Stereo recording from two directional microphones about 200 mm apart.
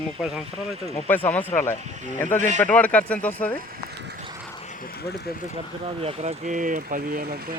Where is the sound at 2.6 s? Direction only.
5° left (ahead or behind).